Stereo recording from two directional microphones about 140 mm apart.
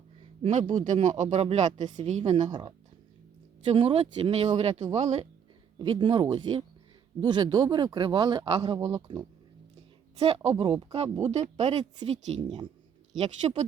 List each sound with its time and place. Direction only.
0.7 s speech: 60° right (ahead or behind)
2.5 s speech: 35° right (ahead or behind); by 5.3 s 55° right (ahead or behind)
5.8 s speech: 35° right (ahead or behind)
8.4 s speech: 45° right (ahead or behind)
8.9 s speech: 30° right (ahead or behind)
10.2 s speech: 45° right (ahead or behind)